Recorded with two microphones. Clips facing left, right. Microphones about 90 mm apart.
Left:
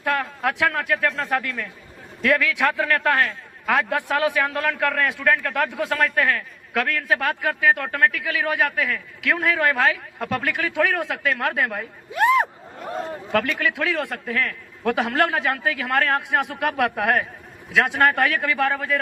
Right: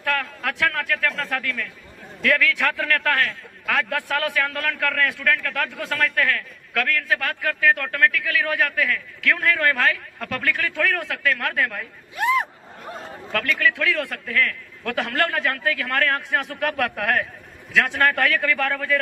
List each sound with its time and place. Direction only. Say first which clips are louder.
0.0 s a man's voice: left 2 dB; 20° left (ahead or behind)
13.3 s a man's voice: even; 20° left (ahead or behind)